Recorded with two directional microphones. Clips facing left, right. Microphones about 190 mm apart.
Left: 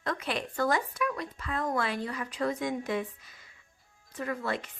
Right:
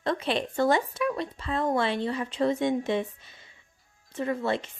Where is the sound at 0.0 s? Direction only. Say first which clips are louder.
Right 5 dB; 25° right (ahead or behind).